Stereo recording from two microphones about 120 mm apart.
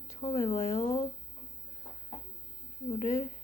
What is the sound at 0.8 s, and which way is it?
Speech, 30° left (ahead or behind).